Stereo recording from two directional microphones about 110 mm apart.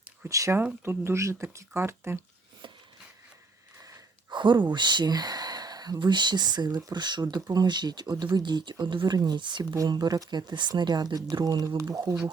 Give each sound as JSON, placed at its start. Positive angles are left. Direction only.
{"t": 0.3, "sound": "speech", "side_deg": -30}
{"t": 3.8, "sound": "speech", "side_deg": -45}
{"t": 9.7, "sound": "speech", "side_deg": -35}